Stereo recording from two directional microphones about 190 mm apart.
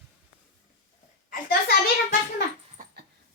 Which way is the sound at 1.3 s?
55° left (ahead or behind).